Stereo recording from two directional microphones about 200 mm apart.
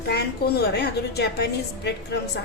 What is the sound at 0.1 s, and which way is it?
A woman's voice, 55° left (ahead or behind).